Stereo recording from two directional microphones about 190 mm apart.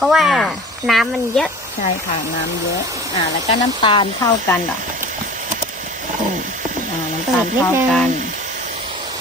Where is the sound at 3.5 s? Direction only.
25° left (ahead or behind).